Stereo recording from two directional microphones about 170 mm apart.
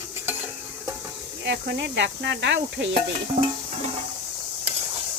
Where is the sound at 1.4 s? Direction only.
85° right.